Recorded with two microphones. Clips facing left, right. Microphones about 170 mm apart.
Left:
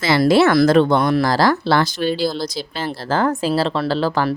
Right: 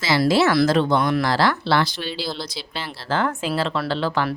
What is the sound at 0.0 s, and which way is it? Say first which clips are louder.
Speech: left 4 dB; 55° left (ahead or behind).